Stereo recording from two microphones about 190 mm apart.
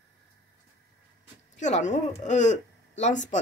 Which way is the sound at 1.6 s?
40° left (ahead or behind).